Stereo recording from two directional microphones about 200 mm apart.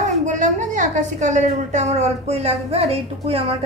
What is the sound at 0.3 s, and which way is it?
A woman's voice, 40° right (ahead or behind).